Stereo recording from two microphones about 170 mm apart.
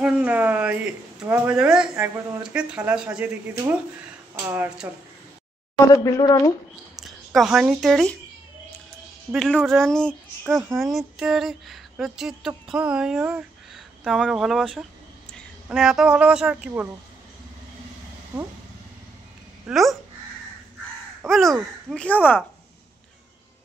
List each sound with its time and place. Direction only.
0.0 s speech: 10° right (ahead or behind)
6.0 s speech: 20° left (ahead or behind)
7.0 s speech: centre (ahead or behind)
9.3 s speech: centre (ahead or behind)
19.7 s speech: centre (ahead or behind)
21.3 s speech: centre (ahead or behind)